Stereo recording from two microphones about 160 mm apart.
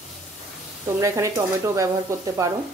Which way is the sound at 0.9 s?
20° right (ahead or behind).